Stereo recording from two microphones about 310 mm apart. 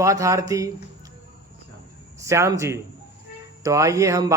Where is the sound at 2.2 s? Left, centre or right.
Centre.